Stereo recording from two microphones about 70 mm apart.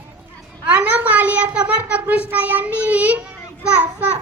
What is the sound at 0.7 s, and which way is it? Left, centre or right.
A child's voice, right.